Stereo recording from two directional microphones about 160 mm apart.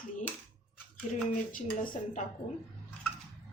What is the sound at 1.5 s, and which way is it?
Speech, 55° left (ahead or behind).